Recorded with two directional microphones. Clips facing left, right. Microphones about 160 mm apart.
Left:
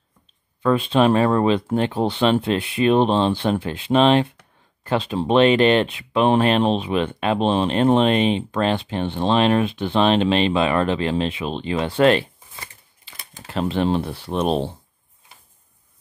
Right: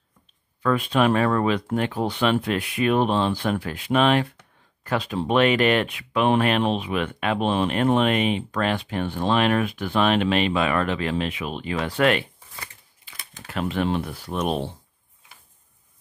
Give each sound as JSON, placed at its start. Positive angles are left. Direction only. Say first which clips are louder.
{"t": 0.6, "sound": "speech", "louder": "left 4 dB", "side_deg": 25}